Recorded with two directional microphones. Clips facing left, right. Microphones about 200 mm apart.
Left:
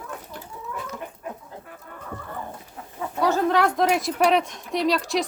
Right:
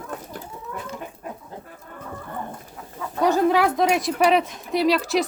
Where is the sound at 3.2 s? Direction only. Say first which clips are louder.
Right 3 dB; 15° right (ahead or behind).